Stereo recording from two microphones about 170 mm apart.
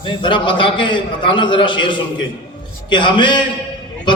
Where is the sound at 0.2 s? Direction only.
30° left (ahead or behind).